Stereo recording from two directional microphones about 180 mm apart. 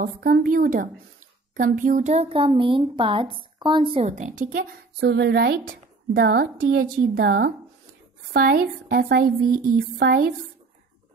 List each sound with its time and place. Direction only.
0.0 s a woman's voice: 50° right (ahead or behind)